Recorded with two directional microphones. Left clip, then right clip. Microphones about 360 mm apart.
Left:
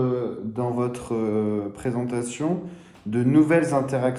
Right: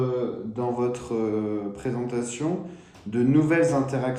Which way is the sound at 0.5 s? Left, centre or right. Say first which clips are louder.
Even; centre.